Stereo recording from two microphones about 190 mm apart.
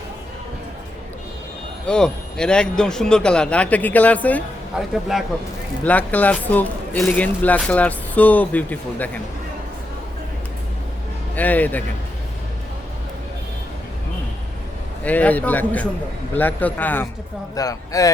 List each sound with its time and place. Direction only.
1.9 s speech: 5° left (ahead or behind)
5.8 s speech: 10° left (ahead or behind)
11.3 s speech: 10° left (ahead or behind)
15.0 s speech: 10° left (ahead or behind)